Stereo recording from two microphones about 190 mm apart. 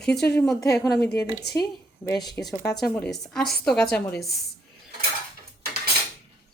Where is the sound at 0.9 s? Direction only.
5° left (ahead or behind).